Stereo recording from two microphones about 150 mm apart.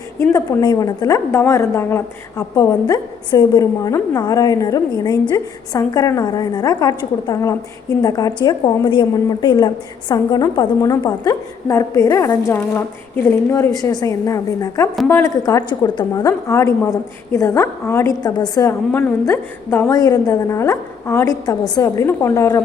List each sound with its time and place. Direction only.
0.2 s a woman's voice: 25° left (ahead or behind)
15.4 s a woman's voice: 25° left (ahead or behind)